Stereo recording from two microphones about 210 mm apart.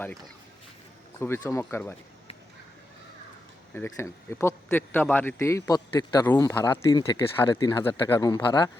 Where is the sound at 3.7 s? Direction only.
15° left (ahead or behind).